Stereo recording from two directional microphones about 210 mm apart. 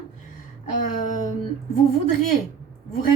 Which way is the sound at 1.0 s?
35° left (ahead or behind).